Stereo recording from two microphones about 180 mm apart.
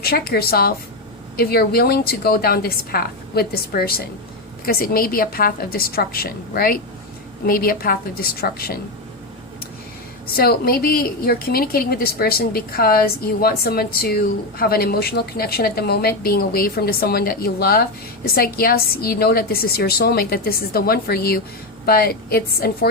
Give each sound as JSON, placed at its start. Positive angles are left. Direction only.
{"t": 0.0, "sound": "a woman's voice", "side_deg": 60}
{"t": 10.3, "sound": "a woman's voice", "side_deg": 60}